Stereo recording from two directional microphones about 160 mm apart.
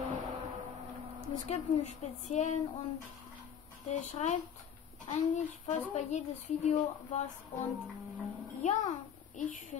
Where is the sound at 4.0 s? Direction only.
45° left (ahead or behind).